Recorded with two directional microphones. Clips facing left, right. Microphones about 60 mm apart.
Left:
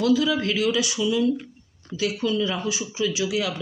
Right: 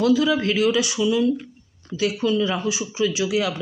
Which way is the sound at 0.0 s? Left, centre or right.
Right.